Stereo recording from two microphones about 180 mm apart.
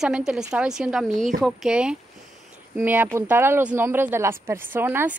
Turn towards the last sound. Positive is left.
turn(degrees=-10)  # may be behind; listen again after turning